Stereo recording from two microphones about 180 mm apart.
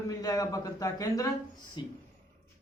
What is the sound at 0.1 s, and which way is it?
Speech, 20° left (ahead or behind).